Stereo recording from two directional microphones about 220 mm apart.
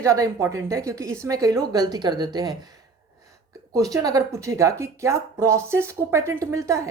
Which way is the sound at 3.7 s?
15° right (ahead or behind).